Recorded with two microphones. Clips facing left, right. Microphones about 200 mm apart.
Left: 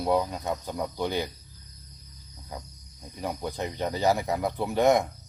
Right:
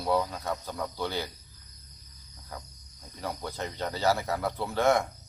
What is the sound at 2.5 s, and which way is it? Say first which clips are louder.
Speech: left 3 dB; 15° left (ahead or behind).